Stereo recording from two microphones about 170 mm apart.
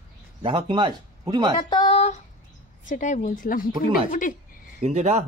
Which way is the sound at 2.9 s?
45° left (ahead or behind).